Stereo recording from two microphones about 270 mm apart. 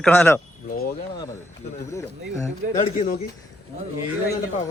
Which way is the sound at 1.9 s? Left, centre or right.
Centre.